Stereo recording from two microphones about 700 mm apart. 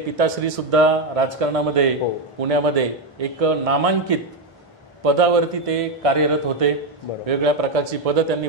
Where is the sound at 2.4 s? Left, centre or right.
Right.